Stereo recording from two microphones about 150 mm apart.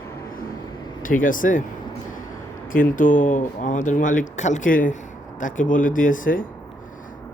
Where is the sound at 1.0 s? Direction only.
65° left (ahead or behind).